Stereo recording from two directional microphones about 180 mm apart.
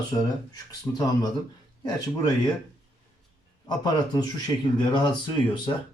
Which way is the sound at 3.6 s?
20° left (ahead or behind).